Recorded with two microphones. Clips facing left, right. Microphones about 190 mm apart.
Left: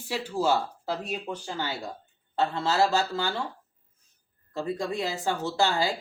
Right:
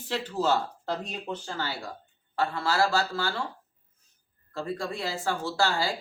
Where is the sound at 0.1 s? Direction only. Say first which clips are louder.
Left 1 dB; 10° left (ahead or behind).